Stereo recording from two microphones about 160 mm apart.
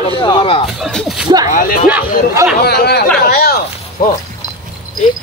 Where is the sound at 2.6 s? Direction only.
80° left.